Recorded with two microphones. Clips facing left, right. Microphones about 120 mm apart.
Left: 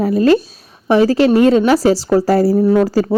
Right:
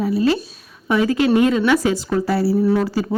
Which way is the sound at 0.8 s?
30° left (ahead or behind).